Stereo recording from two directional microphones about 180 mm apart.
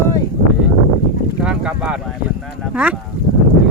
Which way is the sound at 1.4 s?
5° right (ahead or behind).